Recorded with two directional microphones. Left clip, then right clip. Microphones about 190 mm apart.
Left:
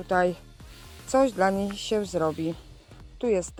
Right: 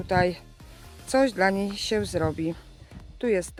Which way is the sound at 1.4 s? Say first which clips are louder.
Right 1 dB; 15° right (ahead or behind).